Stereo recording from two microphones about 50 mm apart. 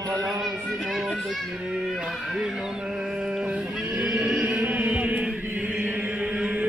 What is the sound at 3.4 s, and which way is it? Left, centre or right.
Neigh, right.